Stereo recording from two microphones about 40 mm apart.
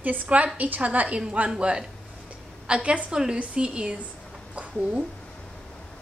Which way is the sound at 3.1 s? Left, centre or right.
Centre.